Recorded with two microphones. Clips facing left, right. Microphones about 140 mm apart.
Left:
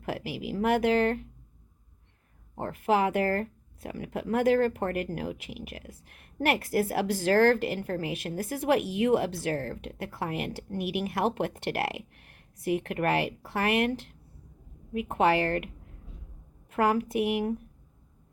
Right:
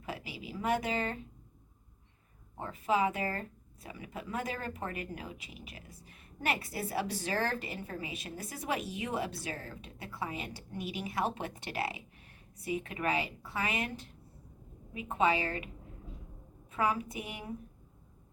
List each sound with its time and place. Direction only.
0.0 s speech: 70° left (ahead or behind)
2.6 s speech: 70° left (ahead or behind)
16.7 s speech: 70° left (ahead or behind)